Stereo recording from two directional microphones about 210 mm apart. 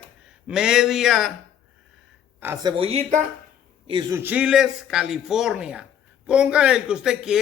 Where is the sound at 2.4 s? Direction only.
10° right (ahead or behind).